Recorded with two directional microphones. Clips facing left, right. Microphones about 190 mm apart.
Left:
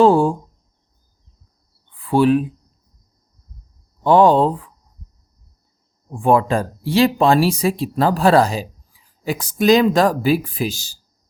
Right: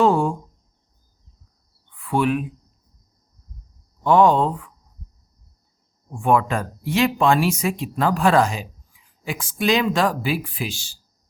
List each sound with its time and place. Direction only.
0.0 s speech: 30° left (ahead or behind)
1.9 s speech: 30° left (ahead or behind)
4.0 s speech: 30° left (ahead or behind)
6.1 s speech: 30° left (ahead or behind)